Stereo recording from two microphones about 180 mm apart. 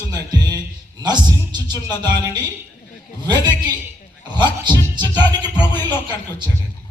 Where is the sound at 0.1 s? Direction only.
20° right (ahead or behind).